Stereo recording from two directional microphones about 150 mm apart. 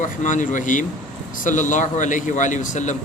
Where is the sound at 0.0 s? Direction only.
60° left (ahead or behind).